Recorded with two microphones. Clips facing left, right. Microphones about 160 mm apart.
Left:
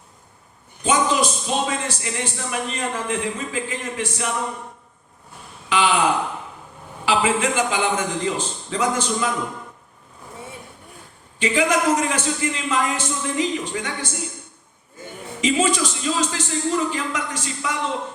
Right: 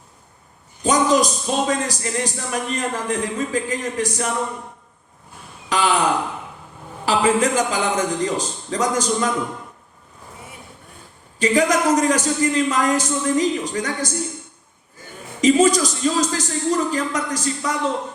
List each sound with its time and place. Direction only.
0.9 s speech: 40° right (ahead or behind)
5.6 s speech: 40° right (ahead or behind)
7.0 s speech: 40° right (ahead or behind)
11.3 s speech: 40° right (ahead or behind)
15.4 s speech: 40° right (ahead or behind)